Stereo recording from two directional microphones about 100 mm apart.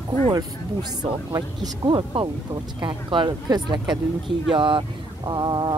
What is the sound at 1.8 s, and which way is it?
Speech, 55° right (ahead or behind).